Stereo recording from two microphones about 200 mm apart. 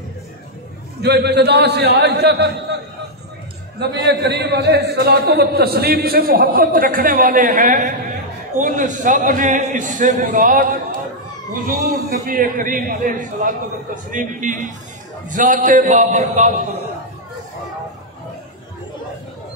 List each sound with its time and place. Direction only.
1.0 s a man's voice: 55° right (ahead or behind)
3.8 s a man's voice: 60° right (ahead or behind); by 16.5 s 40° right (ahead or behind)